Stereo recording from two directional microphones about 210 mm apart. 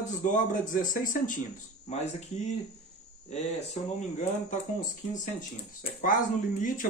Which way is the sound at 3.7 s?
35° left (ahead or behind).